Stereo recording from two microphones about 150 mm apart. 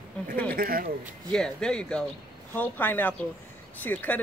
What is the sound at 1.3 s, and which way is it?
Speech, 5° left (ahead or behind).